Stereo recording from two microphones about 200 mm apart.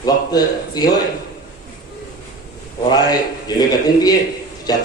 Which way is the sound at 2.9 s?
20° left (ahead or behind).